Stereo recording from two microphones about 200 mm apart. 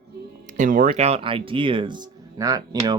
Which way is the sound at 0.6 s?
40° right (ahead or behind).